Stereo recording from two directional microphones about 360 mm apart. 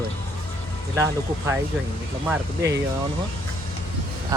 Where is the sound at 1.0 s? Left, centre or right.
Centre.